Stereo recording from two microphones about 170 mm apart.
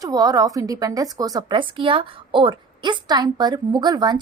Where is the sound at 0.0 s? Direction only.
20° right (ahead or behind).